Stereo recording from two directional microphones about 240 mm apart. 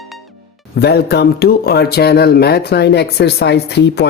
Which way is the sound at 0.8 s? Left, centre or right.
Left.